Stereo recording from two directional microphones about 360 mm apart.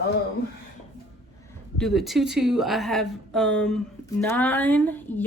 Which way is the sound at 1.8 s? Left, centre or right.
Centre.